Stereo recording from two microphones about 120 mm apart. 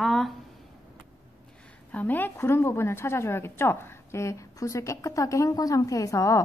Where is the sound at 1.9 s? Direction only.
15° left (ahead or behind).